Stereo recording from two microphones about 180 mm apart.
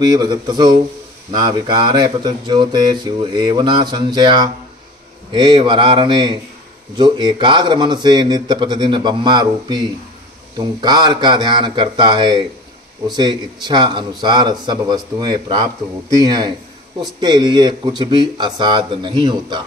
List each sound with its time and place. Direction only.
0.0 s speech: 25° right (ahead or behind)